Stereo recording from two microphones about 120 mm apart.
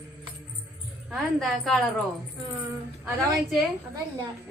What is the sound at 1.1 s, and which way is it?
Speech, centre (ahead or behind).